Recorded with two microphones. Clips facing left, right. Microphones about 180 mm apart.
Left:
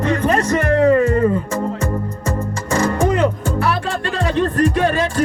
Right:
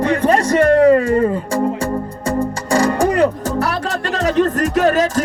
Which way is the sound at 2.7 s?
35° right (ahead or behind).